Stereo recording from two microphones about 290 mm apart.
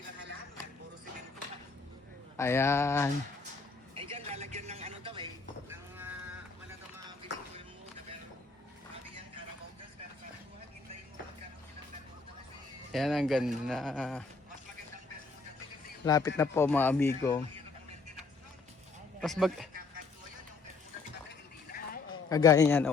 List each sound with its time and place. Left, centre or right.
2.4 s speech: centre
3.9 s a sound: centre
12.9 s speech: centre
16.0 s speech: centre
19.2 s speech: centre
21.2 s a sound: left
22.1 s speech: centre